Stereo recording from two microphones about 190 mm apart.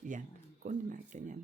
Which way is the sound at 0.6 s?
40° right (ahead or behind).